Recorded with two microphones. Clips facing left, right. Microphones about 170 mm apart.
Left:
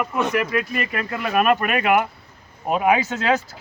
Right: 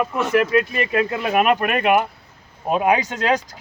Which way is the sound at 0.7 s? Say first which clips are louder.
Right 5 dB; 25° right (ahead or behind).